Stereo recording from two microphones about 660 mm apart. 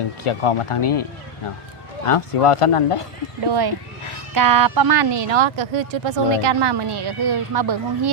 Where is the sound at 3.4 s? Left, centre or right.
Right.